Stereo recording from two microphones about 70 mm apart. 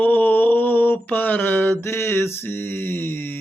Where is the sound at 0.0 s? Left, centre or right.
Left.